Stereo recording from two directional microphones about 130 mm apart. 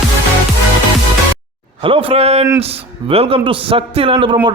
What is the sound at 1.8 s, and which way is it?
A man's voice, 45° right (ahead or behind).